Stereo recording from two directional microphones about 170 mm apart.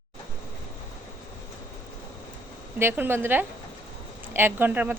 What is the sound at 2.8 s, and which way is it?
Speech, 15° right (ahead or behind).